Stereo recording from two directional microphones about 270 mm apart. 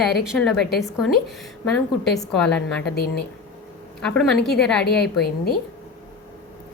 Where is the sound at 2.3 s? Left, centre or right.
Centre.